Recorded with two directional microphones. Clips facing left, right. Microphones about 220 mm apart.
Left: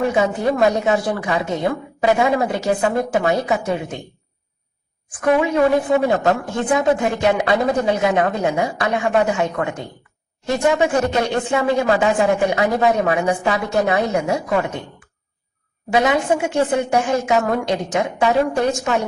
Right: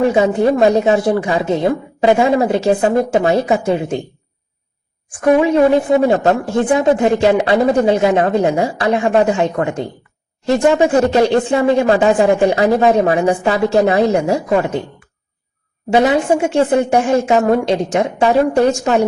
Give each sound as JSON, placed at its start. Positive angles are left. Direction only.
{"t": 0.1, "sound": "speech", "side_deg": -25}
{"t": 5.4, "sound": "speech", "side_deg": -25}
{"t": 15.9, "sound": "speech", "side_deg": -30}